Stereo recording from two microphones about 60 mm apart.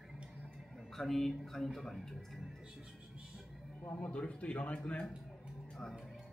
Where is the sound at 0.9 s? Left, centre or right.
Centre.